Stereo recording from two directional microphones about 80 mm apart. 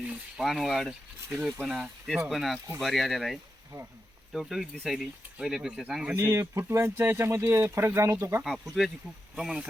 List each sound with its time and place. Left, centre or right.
0.4 s speech: centre
6.1 s speech: right
8.8 s speech: centre